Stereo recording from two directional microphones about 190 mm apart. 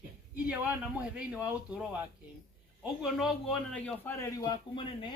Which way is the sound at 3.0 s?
Centre (ahead or behind).